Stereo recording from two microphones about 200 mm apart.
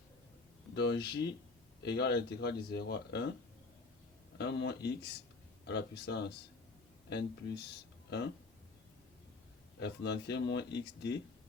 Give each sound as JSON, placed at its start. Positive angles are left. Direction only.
{"t": 0.8, "sound": "speech", "side_deg": 55}
{"t": 4.4, "sound": "speech", "side_deg": 60}
{"t": 9.8, "sound": "speech", "side_deg": 60}